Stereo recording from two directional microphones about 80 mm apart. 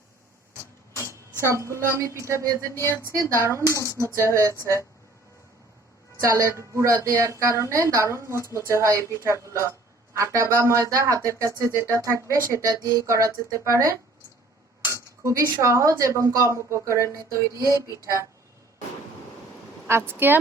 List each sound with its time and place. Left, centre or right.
1.0 s a sound: right
1.6 s speech: right
2.6 s music: left
6.1 s speech: right
8.3 s music: left
8.5 s speech: right
19.9 s speech: right